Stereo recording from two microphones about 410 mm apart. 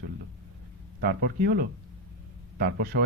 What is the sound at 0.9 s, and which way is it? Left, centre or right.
Speech, right.